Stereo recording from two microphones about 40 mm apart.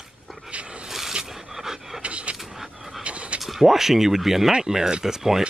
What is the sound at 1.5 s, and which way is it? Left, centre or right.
Pant, centre.